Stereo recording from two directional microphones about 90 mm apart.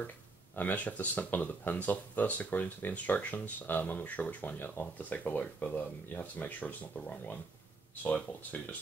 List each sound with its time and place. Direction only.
0.6 s speech: 20° left (ahead or behind)